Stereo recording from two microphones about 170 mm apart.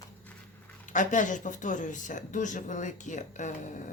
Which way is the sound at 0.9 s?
50° left (ahead or behind).